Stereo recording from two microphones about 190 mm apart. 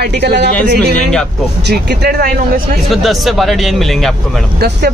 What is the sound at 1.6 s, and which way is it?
Speech, 55° right (ahead or behind).